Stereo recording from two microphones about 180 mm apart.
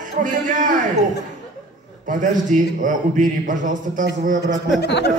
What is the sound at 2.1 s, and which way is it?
A man's voice, 45° right (ahead or behind).